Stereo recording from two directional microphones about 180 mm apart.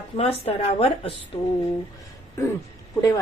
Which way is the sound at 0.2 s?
35° left (ahead or behind).